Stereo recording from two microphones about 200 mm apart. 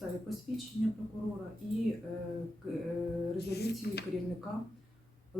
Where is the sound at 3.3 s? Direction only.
55° left (ahead or behind).